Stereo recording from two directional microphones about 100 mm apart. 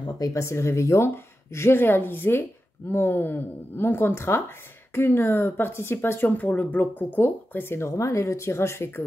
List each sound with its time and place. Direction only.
0.0 s speech: 35° left (ahead or behind)